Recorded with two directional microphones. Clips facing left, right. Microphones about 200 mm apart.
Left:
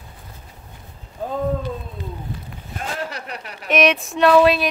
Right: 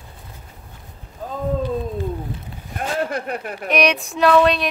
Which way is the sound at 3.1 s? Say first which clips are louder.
Right 7 dB; 50° right (ahead or behind).